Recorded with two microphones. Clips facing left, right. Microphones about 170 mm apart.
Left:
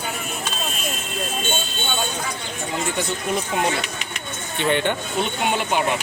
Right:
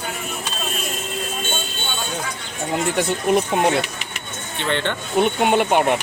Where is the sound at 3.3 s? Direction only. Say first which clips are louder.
Right 8 dB; 65° right (ahead or behind).